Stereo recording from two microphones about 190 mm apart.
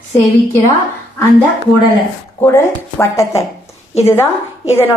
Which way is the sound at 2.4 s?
15° left (ahead or behind).